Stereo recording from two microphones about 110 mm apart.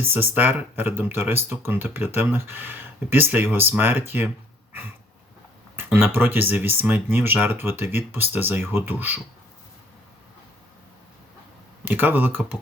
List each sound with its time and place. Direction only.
0.0 s speech: 20° right (ahead or behind)
5.7 s speech: 20° right (ahead or behind)
11.9 s speech: 15° right (ahead or behind)